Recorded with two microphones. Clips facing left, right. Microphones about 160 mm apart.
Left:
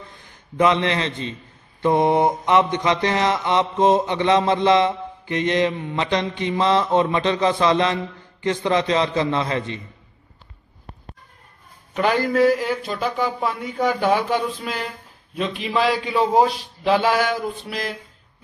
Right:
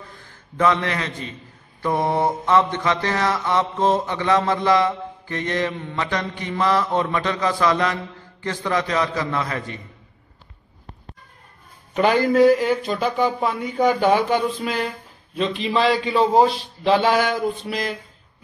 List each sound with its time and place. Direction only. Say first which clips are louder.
0.1 s a man's voice: left 1 dB; 20° left (ahead or behind)
1.8 s mantra: left 4 dB; 20° left (ahead or behind)
11.9 s a man's voice: right 2 dB; centre (ahead or behind)